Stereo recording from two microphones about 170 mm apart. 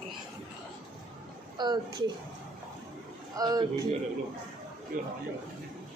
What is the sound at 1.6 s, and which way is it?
Speech, 25° right (ahead or behind).